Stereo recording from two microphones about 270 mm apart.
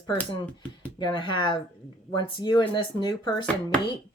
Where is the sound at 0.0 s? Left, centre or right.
Centre.